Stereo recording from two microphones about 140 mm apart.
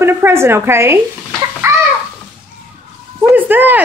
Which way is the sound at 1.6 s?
20° right (ahead or behind).